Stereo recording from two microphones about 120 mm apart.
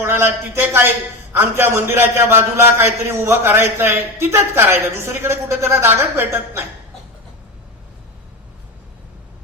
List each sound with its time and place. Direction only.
0.0 s a man's voice: 20° right (ahead or behind)